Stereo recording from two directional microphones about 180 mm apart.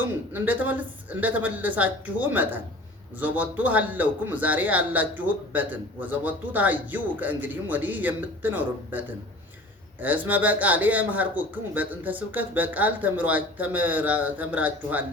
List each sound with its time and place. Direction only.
0.0 s a man's voice: 10° right (ahead or behind)